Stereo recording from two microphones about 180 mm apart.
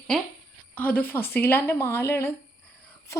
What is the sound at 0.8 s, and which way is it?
Speech, 10° left (ahead or behind).